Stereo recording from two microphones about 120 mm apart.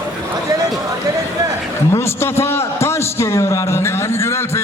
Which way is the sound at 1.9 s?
20° left (ahead or behind).